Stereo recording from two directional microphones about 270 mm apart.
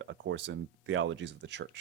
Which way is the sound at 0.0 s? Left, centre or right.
Right.